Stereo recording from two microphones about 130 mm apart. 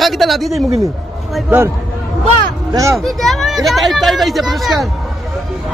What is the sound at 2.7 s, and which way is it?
Speech, 25° right (ahead or behind).